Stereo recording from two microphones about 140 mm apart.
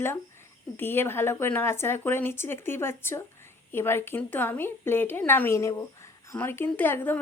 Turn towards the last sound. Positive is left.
turn(degrees=15)  # may be behind; listen again after turning